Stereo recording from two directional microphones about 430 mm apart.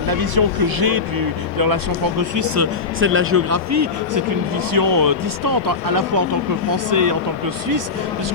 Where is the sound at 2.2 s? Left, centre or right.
Right.